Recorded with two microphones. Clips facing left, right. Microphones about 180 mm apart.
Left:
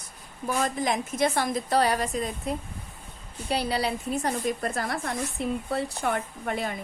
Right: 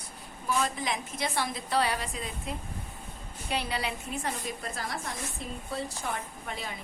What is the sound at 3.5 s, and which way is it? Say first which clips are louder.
A woman's voice: left 6 dB; 35° left (ahead or behind).